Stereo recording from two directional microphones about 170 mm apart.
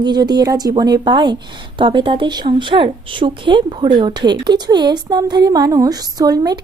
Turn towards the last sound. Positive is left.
turn(degrees=-25)  # may be behind; listen again after turning